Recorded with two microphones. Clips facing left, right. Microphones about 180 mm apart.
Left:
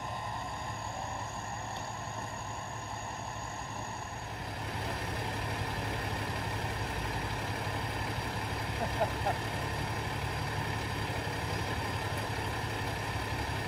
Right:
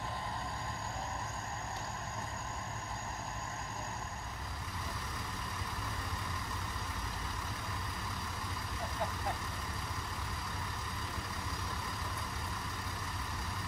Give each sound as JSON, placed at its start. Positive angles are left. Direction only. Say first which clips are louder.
{"t": 4.7, "sound": "vehicle", "louder": "left 7 dB", "side_deg": 65}